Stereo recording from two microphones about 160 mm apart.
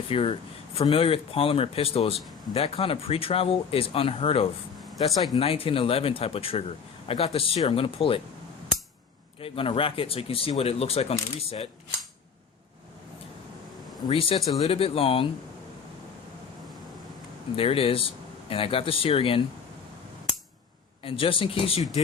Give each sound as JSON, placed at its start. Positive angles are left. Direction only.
{"t": 0.1, "sound": "speech", "side_deg": 35}
{"t": 9.4, "sound": "speech", "side_deg": 35}
{"t": 14.1, "sound": "speech", "side_deg": 35}
{"t": 17.6, "sound": "speech", "side_deg": 35}
{"t": 21.0, "sound": "speech", "side_deg": 35}